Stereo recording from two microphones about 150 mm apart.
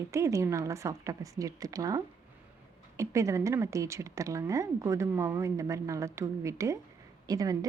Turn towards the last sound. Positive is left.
turn(degrees=-25)  # may be behind; listen again after turning